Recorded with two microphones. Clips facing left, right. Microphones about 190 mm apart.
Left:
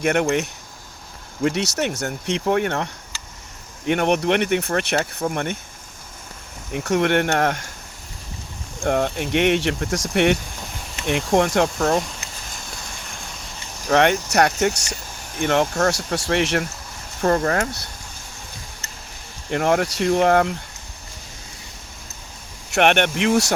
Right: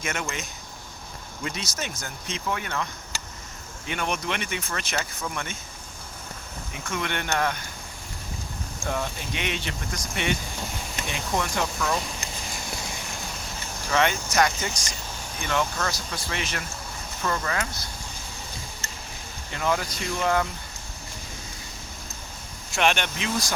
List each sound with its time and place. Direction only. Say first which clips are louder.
0.0 s speech: left 12 dB; 60° left (ahead or behind)
6.9 s speech: left 10 dB; 65° left (ahead or behind)
8.8 s speech: left 10 dB; 65° left (ahead or behind)
11.0 s speech: left 11 dB; 65° left (ahead or behind)
11.8 s speech: left 8 dB; 50° left (ahead or behind)
12.5 s a sound: right 3 dB; 5° right (ahead or behind)
13.9 s speech: left 6 dB; 65° left (ahead or behind)
17.2 s speech: left 9 dB; 50° left (ahead or behind)
19.5 s speech: left 8 dB; 65° left (ahead or behind)
22.7 s speech: left 7 dB; 65° left (ahead or behind)